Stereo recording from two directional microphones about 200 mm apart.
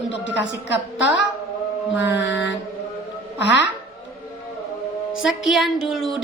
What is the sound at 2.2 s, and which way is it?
Speech, 60° left (ahead or behind).